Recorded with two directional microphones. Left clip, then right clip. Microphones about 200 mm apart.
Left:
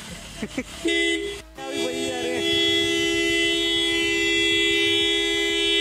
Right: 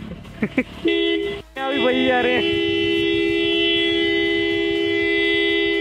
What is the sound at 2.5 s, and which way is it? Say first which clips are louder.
Vehicle: right 1 dB; centre (ahead or behind).